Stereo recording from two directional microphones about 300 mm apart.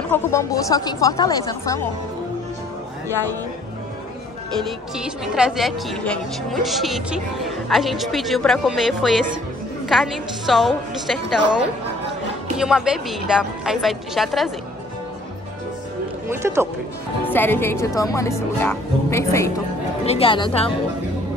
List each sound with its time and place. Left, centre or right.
0.1 s speech: centre
4.6 s a woman's voice: centre
12.5 s a woman's voice: centre
16.3 s speech: centre
17.3 s speech: centre